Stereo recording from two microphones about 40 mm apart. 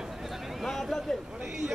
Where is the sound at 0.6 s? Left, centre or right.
Centre.